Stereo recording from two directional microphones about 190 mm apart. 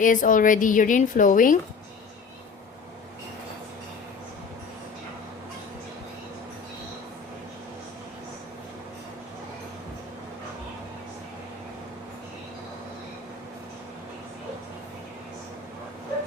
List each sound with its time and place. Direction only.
0.0 s a woman's voice: 45° left (ahead or behind)